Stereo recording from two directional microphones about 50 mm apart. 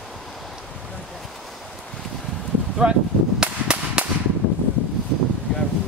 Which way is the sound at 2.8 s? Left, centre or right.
Centre.